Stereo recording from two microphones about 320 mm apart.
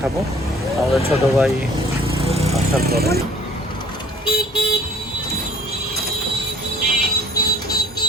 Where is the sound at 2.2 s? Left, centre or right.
Centre.